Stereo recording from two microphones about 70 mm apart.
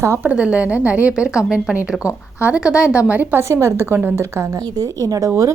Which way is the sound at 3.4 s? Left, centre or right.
Right.